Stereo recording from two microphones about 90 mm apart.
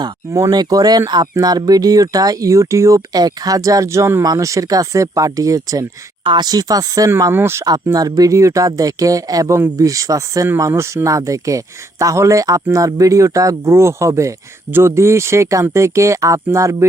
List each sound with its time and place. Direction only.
0.3 s speech: 35° right (ahead or behind)
0.5 s speech: 50° right (ahead or behind)
6.2 s speech: 55° right (ahead or behind)
7.3 s speech: 30° right (ahead or behind)
7.9 s speech: 45° right (ahead or behind)